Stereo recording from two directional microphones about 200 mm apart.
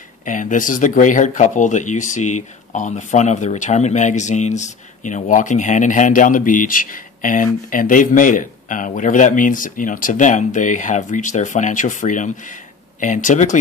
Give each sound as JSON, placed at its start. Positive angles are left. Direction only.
{"t": 0.2, "sound": "speech", "side_deg": 40}